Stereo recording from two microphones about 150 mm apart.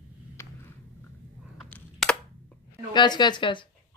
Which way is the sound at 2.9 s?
30° left (ahead or behind).